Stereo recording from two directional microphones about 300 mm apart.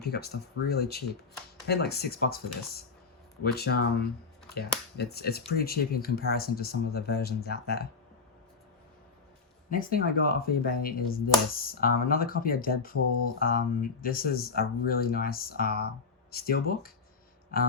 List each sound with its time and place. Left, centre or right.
0.0 s speech: left
9.6 s speech: left